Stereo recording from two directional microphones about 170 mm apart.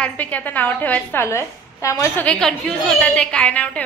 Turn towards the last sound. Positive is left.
turn(degrees=10)  # may be behind; listen again after turning